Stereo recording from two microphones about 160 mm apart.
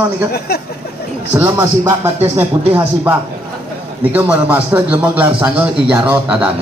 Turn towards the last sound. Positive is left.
turn(degrees=-5)  # may be behind; listen again after turning